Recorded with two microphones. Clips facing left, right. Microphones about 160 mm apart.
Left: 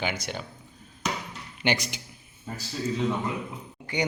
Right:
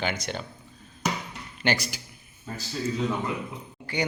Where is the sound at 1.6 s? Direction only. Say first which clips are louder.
Even; 15° left (ahead or behind).